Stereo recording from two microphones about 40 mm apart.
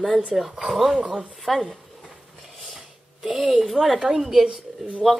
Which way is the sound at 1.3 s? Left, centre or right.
Centre.